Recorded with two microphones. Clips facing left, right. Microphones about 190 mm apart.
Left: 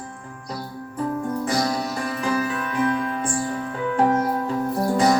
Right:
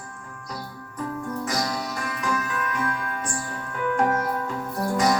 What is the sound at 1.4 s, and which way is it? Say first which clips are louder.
Music: left 4 dB; 30° left (ahead or behind).